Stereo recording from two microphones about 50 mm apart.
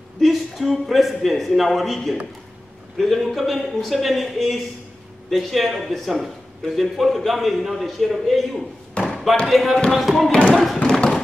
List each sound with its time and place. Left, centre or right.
0.2 s a man's voice: centre
10.8 s tap: centre